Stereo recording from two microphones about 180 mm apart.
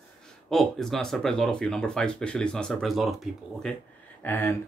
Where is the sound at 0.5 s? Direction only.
Centre (ahead or behind).